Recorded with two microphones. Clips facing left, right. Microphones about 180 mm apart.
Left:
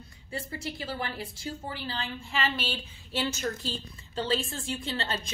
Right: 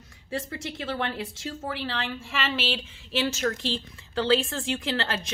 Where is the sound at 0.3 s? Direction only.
80° right.